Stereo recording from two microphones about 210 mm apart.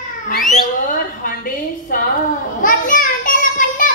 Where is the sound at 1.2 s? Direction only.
40° left (ahead or behind).